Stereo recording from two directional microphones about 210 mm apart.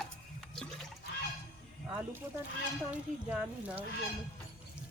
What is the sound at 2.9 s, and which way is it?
Speech, 5° right (ahead or behind).